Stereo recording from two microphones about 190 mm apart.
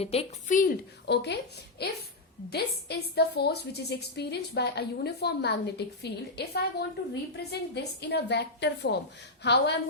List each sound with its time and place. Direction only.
0.0 s speech: 30° left (ahead or behind)
1.0 s a woman's voice: 60° left (ahead or behind)